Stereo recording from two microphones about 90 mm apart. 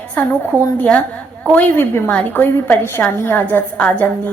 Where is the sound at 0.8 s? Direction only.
20° left (ahead or behind).